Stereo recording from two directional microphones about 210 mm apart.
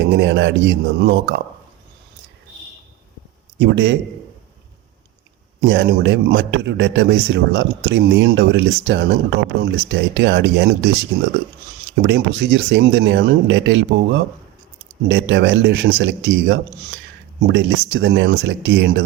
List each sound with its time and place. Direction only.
0.0 s a man's voice: 55° right (ahead or behind)
3.6 s a man's voice: 55° right (ahead or behind)
5.5 s a man's voice: 55° right (ahead or behind)